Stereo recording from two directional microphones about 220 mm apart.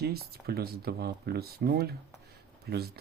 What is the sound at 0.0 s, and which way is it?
Speech, 45° right (ahead or behind).